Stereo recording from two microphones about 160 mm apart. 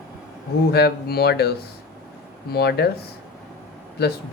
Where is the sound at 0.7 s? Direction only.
80° left.